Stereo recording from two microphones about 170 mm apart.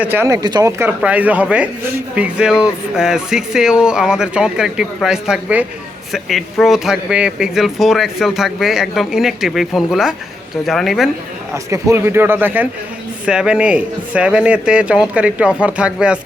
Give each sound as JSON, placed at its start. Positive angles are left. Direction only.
{"t": 0.0, "sound": "a man's voice", "side_deg": -10}
{"t": 11.5, "sound": "a man's voice", "side_deg": -15}